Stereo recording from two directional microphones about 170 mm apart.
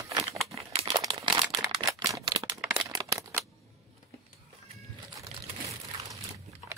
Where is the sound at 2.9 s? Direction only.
20° right (ahead or behind).